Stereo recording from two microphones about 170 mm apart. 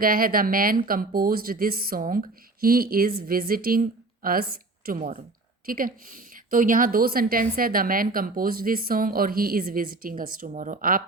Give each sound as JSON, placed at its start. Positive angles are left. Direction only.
{"t": 0.0, "sound": "a woman's voice", "side_deg": -55}